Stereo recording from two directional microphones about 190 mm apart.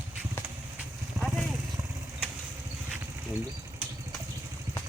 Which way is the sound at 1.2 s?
15° right (ahead or behind).